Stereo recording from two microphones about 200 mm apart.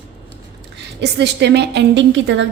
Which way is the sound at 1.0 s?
60° right (ahead or behind).